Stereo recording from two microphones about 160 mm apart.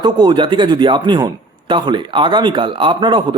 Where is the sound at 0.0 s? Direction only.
30° right (ahead or behind).